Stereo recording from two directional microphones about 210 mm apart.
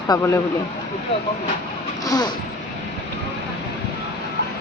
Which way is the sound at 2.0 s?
20° left (ahead or behind).